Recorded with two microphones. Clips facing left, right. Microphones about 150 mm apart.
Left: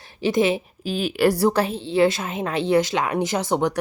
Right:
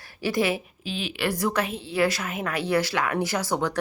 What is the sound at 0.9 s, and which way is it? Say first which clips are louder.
A woman's voice: left 9 dB; 45° left (ahead or behind).